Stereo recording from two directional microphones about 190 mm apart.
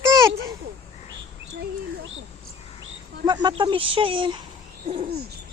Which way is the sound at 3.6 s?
25° right (ahead or behind).